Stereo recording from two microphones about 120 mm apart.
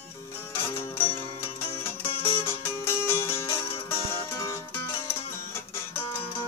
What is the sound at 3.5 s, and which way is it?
Music, 50° left (ahead or behind).